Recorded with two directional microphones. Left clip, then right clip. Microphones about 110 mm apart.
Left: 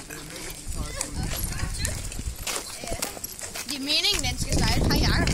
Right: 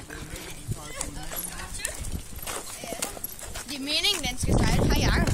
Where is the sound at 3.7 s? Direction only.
15° right (ahead or behind).